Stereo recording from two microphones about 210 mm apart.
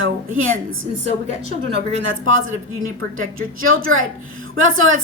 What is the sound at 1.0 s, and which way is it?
Speech, 30° right (ahead or behind).